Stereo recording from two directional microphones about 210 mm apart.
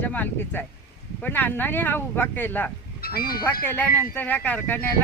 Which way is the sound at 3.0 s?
45° left (ahead or behind).